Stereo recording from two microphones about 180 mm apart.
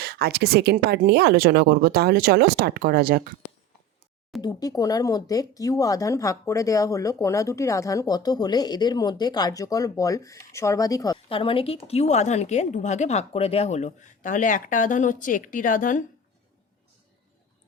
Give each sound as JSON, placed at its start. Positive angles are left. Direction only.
{"t": 0.0, "sound": "speech", "side_deg": -60}
{"t": 4.4, "sound": "speech", "side_deg": 20}